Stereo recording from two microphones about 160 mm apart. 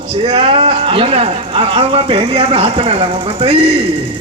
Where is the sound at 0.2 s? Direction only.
35° right (ahead or behind).